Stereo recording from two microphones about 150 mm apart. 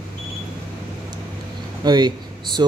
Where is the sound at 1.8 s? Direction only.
30° right (ahead or behind).